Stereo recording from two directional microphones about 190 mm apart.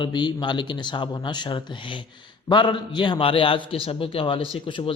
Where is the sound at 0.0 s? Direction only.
25° left (ahead or behind).